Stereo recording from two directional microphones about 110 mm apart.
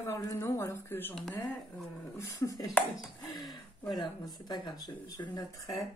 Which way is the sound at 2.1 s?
30° left (ahead or behind).